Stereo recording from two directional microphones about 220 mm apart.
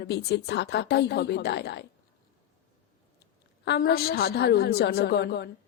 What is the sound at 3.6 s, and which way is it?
A woman's voice, 45° left (ahead or behind).